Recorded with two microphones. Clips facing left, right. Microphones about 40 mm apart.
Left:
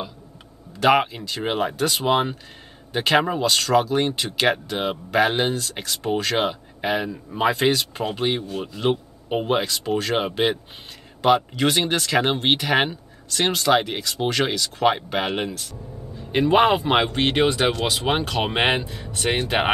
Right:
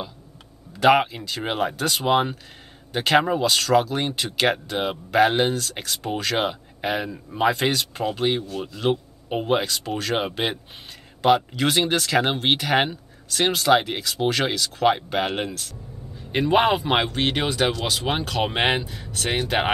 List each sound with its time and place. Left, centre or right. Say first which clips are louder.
0.7 s speech: right 1 dB; centre
17.1 s speech: left 4 dB; left
19.3 s speech: even; left